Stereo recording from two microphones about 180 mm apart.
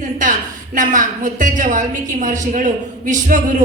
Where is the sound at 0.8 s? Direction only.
45° right (ahead or behind).